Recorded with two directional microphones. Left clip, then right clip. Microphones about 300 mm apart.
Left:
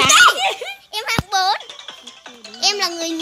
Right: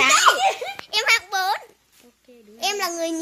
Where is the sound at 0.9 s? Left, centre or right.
Centre.